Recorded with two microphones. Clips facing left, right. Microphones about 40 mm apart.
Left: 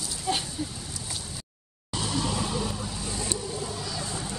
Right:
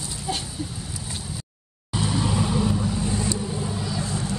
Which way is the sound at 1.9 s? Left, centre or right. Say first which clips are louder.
Right 4 dB; centre.